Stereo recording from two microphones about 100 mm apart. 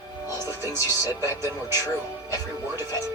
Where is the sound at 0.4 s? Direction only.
25° right (ahead or behind).